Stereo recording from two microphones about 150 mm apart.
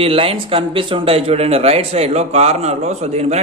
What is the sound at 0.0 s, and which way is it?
A man's voice, 40° right (ahead or behind).